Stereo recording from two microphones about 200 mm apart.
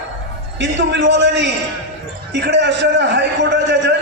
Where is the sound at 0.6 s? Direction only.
65° right (ahead or behind).